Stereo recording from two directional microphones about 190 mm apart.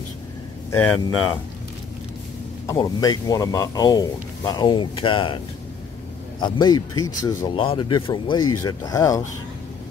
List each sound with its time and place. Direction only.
0.7 s speech: 10° left (ahead or behind)
2.6 s speech: 20° left (ahead or behind)
6.4 s speech: 20° left (ahead or behind)